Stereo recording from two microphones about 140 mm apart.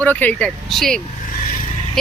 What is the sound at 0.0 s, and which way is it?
Speech, 10° left (ahead or behind).